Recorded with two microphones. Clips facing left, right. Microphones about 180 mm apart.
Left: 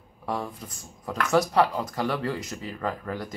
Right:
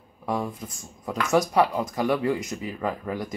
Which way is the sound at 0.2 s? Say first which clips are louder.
Right 3 dB; 10° right (ahead or behind).